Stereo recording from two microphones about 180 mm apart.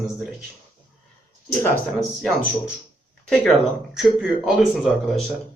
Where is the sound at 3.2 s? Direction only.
5° left (ahead or behind).